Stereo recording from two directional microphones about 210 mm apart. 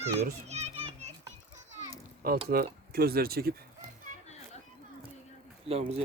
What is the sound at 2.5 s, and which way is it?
Speech, 45° right (ahead or behind).